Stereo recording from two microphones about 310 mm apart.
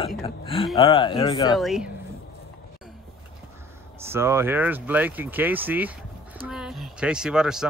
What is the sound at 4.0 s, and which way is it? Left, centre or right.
Speech, centre.